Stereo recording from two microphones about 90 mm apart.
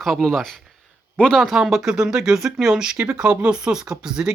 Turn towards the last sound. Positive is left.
turn(degrees=-10)  # may be behind; listen again after turning